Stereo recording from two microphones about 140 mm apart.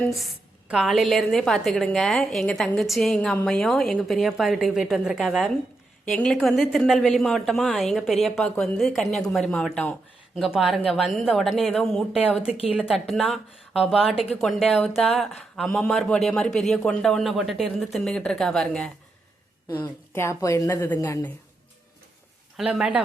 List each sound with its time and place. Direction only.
0.0 s a man's voice: centre (ahead or behind)
19.6 s speech: 30° left (ahead or behind)
20.1 s a woman's voice: 20° left (ahead or behind)
22.5 s speech: 5° right (ahead or behind)